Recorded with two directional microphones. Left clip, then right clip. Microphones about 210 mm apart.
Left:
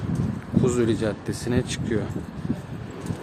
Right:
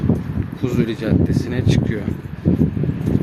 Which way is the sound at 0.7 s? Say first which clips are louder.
Right 4 dB; 10° left (ahead or behind).